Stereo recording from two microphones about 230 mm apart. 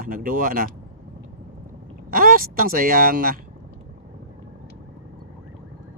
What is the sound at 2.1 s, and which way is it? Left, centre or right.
Speech, right.